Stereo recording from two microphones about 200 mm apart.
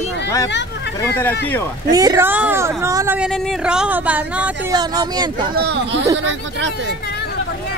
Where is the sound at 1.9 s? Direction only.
15° right (ahead or behind).